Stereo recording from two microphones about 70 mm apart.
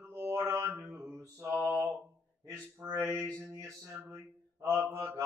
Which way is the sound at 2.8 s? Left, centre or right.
Right.